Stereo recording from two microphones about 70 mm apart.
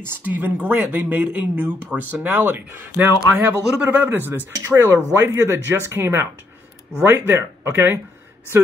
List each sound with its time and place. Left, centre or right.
0.0 s speech: right
4.6 s speech: right
5.1 s speech: right